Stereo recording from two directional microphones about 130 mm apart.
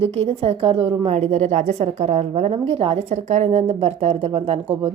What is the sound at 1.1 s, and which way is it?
A woman's voice, 55° right (ahead or behind).